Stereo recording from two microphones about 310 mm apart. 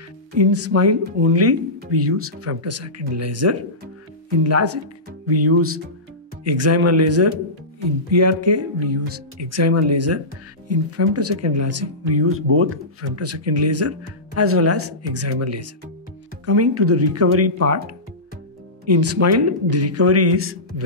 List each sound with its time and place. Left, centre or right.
0.4 s speech: right